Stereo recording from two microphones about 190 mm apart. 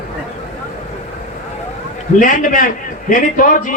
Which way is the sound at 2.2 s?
45° left (ahead or behind).